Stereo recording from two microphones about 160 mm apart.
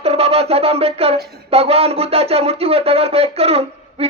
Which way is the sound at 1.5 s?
40° right (ahead or behind).